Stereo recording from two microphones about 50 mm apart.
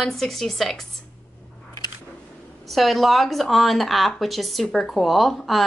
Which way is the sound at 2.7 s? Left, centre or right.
Centre.